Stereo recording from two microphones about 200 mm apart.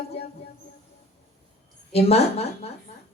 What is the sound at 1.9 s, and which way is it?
Speech, 30° left (ahead or behind).